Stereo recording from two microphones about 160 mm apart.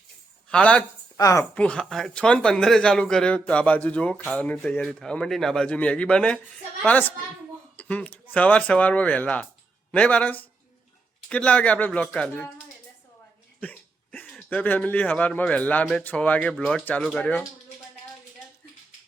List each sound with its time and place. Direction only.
0.5 s a man's voice: 10° left (ahead or behind)
1.1 s a woman's voice: 20° left (ahead or behind)
1.5 s a man's voice: 5° left (ahead or behind)
13.6 s cough: 10° left (ahead or behind)
14.5 s a man's voice: 10° left (ahead or behind)